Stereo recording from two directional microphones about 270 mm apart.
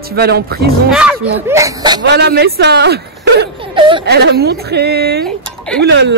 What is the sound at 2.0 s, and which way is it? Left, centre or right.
Speech, right.